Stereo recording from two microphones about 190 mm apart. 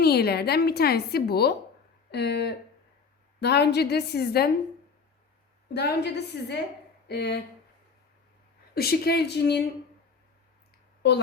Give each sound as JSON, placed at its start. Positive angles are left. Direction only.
{"t": 0.0, "sound": "a woman's voice", "side_deg": 55}
{"t": 5.7, "sound": "a woman's voice", "side_deg": 60}
{"t": 8.7, "sound": "a woman's voice", "side_deg": 55}
{"t": 11.0, "sound": "a woman's voice", "side_deg": 60}